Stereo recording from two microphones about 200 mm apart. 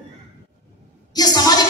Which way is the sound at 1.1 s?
20° left (ahead or behind).